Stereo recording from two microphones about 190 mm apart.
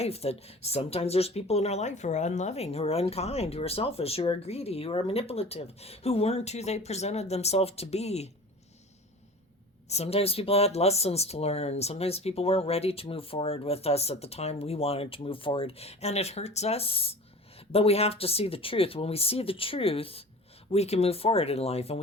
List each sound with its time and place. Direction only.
0.0 s speech: 30° left (ahead or behind)
9.9 s speech: 30° left (ahead or behind)